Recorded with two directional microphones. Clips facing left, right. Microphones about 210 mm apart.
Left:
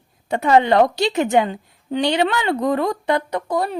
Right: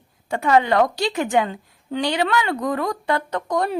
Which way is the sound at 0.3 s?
25° left (ahead or behind).